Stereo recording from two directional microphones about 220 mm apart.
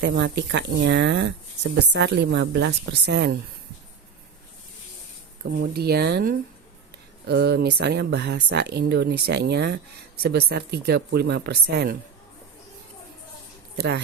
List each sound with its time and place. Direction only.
0.0 s speech: 50° right (ahead or behind)
5.5 s speech: 45° right (ahead or behind)
13.7 s speech: 50° right (ahead or behind)